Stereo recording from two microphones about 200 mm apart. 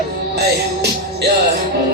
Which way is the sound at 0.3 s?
55° right (ahead or behind).